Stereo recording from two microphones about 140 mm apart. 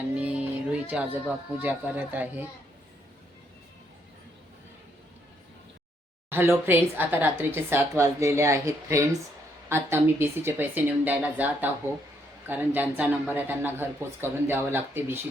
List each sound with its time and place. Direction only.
0.2 s speech: 10° right (ahead or behind)
6.3 s a woman's voice: 15° right (ahead or behind)